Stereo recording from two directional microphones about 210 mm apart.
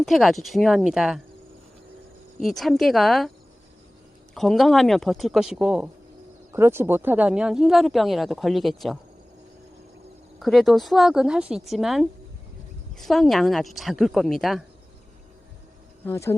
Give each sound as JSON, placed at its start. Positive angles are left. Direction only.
{"t": 0.0, "sound": "speech", "side_deg": 0}
{"t": 2.4, "sound": "speech", "side_deg": 0}
{"t": 4.4, "sound": "speech", "side_deg": 0}
{"t": 10.4, "sound": "speech", "side_deg": 0}
{"t": 16.0, "sound": "speech", "side_deg": 15}